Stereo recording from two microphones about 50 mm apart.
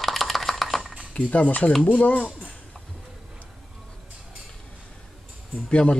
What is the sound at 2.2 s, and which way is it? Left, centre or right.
Speech, centre.